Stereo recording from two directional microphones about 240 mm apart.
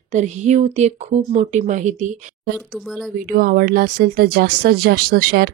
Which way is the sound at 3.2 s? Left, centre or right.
Right.